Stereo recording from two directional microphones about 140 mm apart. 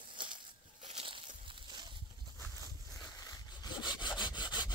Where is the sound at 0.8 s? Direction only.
45° right (ahead or behind).